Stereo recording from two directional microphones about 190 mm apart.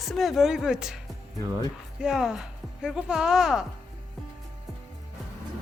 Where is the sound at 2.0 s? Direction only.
5° right (ahead or behind).